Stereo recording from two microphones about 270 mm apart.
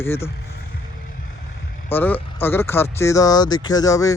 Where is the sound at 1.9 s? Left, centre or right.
Centre.